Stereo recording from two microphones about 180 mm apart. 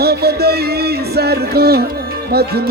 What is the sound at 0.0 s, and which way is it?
Music, 60° right (ahead or behind).